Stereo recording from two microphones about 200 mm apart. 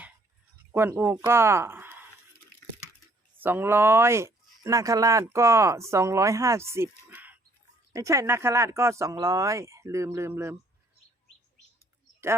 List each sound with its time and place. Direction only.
0.7 s speech: 10° right (ahead or behind)
3.4 s speech: 10° right (ahead or behind)